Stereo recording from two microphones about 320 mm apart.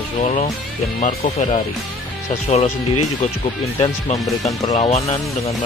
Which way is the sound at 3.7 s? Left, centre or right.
Centre.